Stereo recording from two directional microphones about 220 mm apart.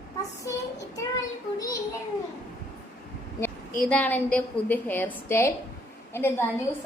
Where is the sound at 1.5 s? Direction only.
15° left (ahead or behind).